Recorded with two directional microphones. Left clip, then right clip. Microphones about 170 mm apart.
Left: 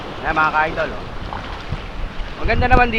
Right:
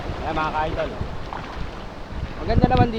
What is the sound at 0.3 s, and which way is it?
Speech, 25° left (ahead or behind).